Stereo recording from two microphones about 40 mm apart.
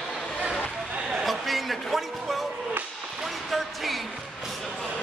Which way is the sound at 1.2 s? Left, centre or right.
Centre.